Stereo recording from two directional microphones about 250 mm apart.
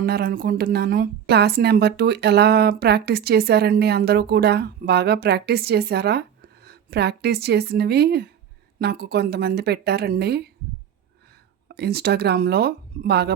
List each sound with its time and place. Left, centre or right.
0.0 s a woman's voice: right
11.7 s a woman's voice: right